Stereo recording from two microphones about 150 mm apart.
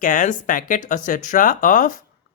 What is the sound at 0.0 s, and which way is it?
Speech, 60° left (ahead or behind).